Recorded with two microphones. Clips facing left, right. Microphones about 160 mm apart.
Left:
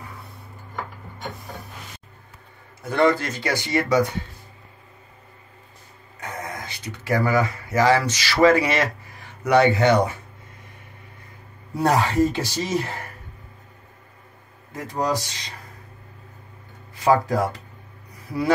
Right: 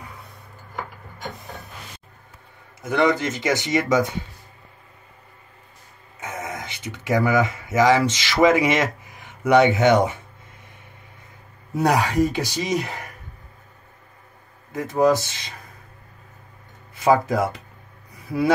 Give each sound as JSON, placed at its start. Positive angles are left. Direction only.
{"t": 2.8, "sound": "speech", "side_deg": -20}
{"t": 6.2, "sound": "speech", "side_deg": -20}
{"t": 11.7, "sound": "speech", "side_deg": -15}
{"t": 14.7, "sound": "speech", "side_deg": -20}
{"t": 17.0, "sound": "speech", "side_deg": -20}